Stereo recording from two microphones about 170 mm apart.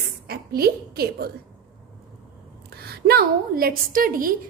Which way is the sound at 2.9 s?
65° right (ahead or behind).